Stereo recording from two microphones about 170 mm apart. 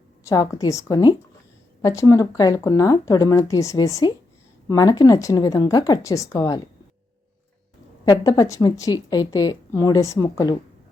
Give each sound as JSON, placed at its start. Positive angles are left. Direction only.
{"t": 0.3, "sound": "speech", "side_deg": 20}
{"t": 8.2, "sound": "speech", "side_deg": 20}